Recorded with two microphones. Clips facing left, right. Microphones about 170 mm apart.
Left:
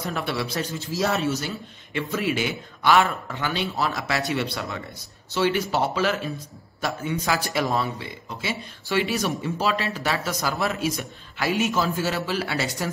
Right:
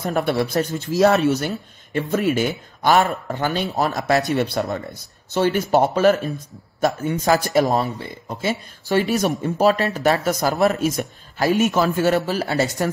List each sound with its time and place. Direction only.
0.0 s a man's voice: 50° right (ahead or behind)
2.0 s a man's voice: 45° right (ahead or behind)